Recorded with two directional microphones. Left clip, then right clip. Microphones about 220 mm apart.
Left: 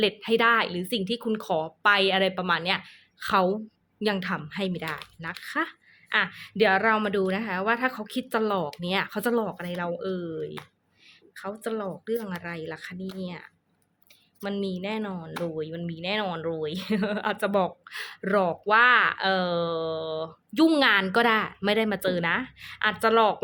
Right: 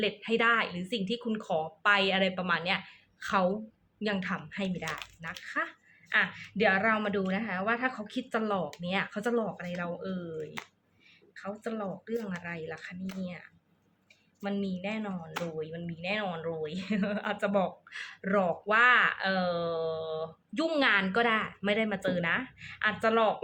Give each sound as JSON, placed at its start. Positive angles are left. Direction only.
{"t": 0.0, "sound": "speech", "side_deg": 55}
{"t": 11.3, "sound": "speech", "side_deg": 55}